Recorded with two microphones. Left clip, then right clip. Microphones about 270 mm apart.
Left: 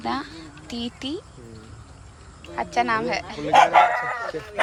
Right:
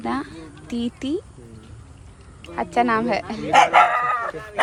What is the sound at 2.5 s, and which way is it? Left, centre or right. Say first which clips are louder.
Speech: right 3 dB; centre.